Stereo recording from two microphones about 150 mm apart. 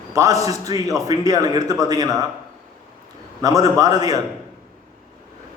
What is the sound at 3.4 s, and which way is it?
Speech, 25° right (ahead or behind).